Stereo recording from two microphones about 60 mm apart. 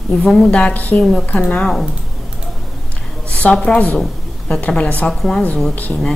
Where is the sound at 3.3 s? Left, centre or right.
Left.